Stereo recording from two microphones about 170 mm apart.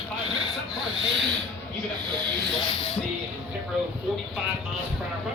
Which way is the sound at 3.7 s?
5° right (ahead or behind).